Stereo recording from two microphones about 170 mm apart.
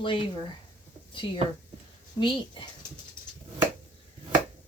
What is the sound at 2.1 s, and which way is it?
Speech, 30° left (ahead or behind).